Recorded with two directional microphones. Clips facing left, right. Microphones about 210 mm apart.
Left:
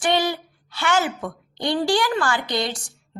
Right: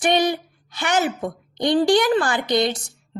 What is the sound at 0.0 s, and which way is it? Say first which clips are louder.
A woman's voice: right 2 dB; 20° right (ahead or behind).